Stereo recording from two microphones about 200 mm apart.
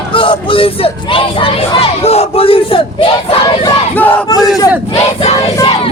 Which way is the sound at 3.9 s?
10° left (ahead or behind).